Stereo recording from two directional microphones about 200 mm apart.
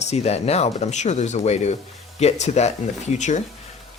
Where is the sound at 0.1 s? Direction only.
30° left (ahead or behind).